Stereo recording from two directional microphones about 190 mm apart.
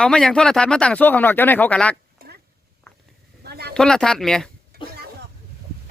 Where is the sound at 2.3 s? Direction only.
55° right (ahead or behind).